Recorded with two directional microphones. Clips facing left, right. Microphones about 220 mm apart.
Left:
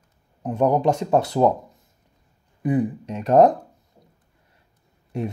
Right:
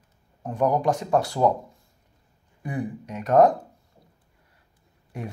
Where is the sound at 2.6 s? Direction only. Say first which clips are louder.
Left 9 dB; 20° left (ahead or behind).